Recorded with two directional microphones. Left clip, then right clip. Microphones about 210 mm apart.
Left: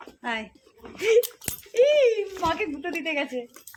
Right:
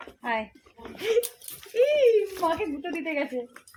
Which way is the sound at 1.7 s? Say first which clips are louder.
Left 3 dB; 35° left (ahead or behind).